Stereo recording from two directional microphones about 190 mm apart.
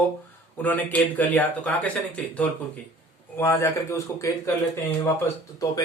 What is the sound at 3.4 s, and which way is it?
Speech, 15° left (ahead or behind).